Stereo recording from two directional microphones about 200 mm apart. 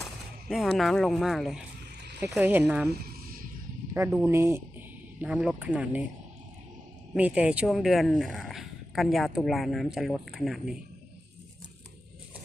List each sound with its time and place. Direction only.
0.0 s speech: centre (ahead or behind)
2.9 s a sound: 50° right (ahead or behind)
3.9 s speech: 10° right (ahead or behind)
7.1 s speech: 5° right (ahead or behind)